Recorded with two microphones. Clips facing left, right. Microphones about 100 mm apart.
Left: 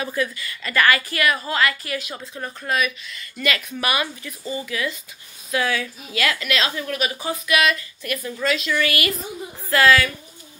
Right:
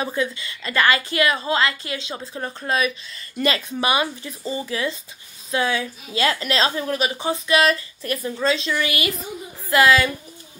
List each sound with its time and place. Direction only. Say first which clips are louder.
0.0 s a woman's voice: right 1 dB; 25° right (ahead or behind)